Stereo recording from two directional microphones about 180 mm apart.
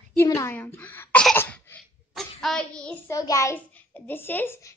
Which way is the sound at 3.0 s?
20° left (ahead or behind).